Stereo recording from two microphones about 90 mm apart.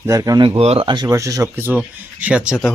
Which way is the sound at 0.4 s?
80° right.